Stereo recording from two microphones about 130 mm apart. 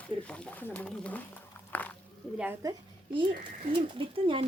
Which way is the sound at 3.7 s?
40° right (ahead or behind).